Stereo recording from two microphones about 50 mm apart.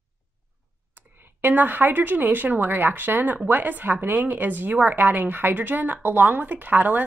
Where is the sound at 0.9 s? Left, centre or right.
Right.